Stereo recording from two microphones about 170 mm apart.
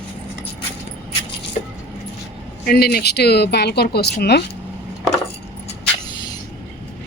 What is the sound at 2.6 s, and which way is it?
Speech, 65° left (ahead or behind).